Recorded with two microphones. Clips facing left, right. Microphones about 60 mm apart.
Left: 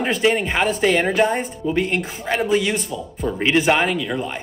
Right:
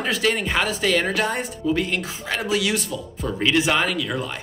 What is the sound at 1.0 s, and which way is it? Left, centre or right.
Speech, centre.